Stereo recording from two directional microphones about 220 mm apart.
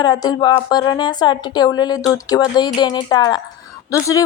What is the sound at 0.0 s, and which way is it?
Speech, 20° left (ahead or behind).